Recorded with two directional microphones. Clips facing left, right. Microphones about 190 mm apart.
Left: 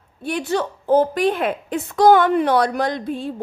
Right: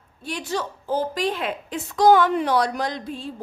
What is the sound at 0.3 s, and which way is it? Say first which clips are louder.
A woman's voice: left 6 dB; 60° left (ahead or behind).